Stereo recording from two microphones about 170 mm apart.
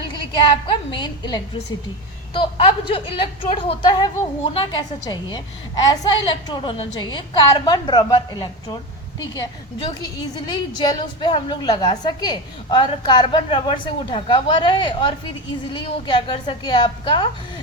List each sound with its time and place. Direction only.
0.1 s a woman's voice: 30° left (ahead or behind)